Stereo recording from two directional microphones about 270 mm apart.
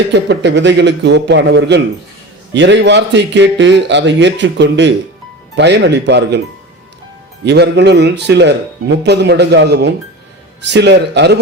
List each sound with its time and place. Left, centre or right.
0.1 s speech: right
7.4 s speech: right